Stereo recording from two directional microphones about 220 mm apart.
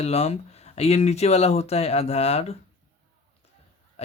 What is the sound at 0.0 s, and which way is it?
Speech, 30° left (ahead or behind).